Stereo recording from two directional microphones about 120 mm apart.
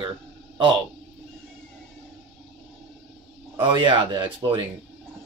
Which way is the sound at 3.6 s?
45° right (ahead or behind).